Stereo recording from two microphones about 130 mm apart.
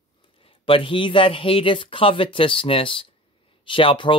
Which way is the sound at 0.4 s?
45° left (ahead or behind).